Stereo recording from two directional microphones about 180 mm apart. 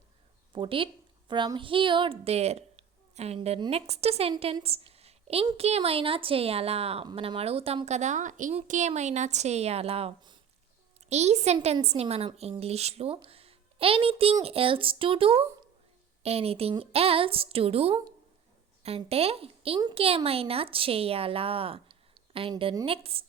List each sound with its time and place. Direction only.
0.5 s a woman's voice: 30° right (ahead or behind)